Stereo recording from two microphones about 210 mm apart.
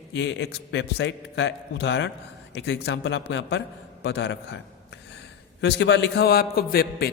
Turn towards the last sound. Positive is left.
turn(degrees=50)  # may be behind; listen again after turning